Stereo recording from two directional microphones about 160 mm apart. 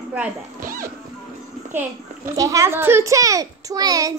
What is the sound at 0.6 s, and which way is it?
Music, 65° right (ahead or behind).